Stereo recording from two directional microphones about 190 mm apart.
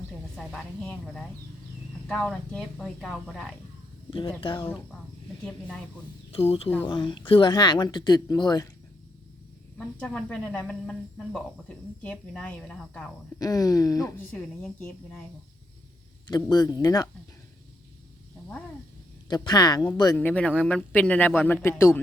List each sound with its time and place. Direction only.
0.3 s speech: centre (ahead or behind)
4.4 s speech: 25° left (ahead or behind)
6.3 s speech: 30° left (ahead or behind)
9.7 s speech: 5° left (ahead or behind)
13.4 s speech: 20° left (ahead or behind)
16.2 s speech: 20° left (ahead or behind)
19.3 s speech: 20° left (ahead or behind)
20.1 s speech: 5° left (ahead or behind)